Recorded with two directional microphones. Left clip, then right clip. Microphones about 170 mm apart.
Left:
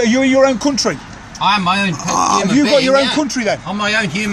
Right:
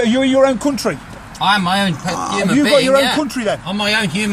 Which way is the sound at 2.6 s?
10° left (ahead or behind).